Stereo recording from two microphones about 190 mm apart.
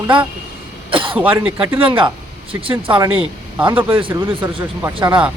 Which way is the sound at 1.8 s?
25° right (ahead or behind).